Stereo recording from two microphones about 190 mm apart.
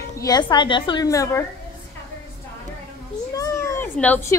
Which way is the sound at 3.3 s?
15° left (ahead or behind).